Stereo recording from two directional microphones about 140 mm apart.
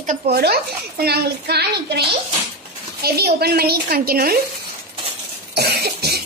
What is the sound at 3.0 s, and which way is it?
A woman's voice, 90° right.